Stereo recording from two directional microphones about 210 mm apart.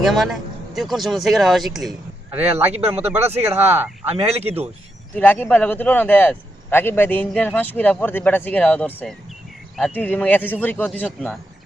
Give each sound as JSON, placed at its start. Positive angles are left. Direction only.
{"t": 0.0, "sound": "speech", "side_deg": 0}
{"t": 2.5, "sound": "speech", "side_deg": -30}
{"t": 3.7, "sound": "speech", "side_deg": -10}
{"t": 4.1, "sound": "speech", "side_deg": -30}
{"t": 5.1, "sound": "a man's voice", "side_deg": 10}